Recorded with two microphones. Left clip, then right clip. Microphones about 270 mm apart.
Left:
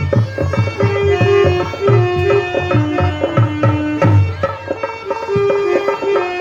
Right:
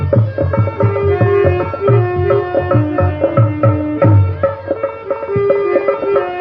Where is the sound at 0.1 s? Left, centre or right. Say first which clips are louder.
Right 3 dB; left.